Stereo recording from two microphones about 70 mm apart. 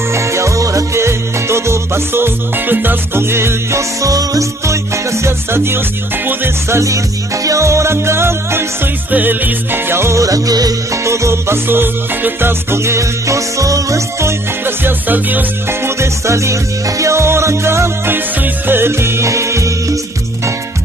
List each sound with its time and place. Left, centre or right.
0.1 s music: right
4.0 s music: right
7.4 s music: right
9.1 s music: right
10.2 s music: right
11.1 s music: right
14.8 s music: right
16.0 s music: right